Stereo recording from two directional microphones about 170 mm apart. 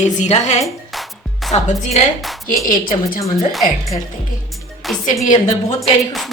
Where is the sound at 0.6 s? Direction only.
Centre (ahead or behind).